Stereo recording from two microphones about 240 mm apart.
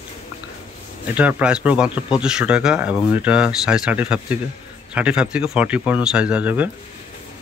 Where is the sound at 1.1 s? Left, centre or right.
Centre.